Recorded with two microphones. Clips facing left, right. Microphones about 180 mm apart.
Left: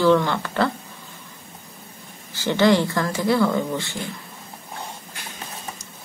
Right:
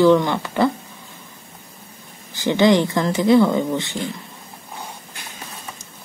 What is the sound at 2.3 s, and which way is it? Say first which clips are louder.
Speech: right 2 dB; 15° right (ahead or behind).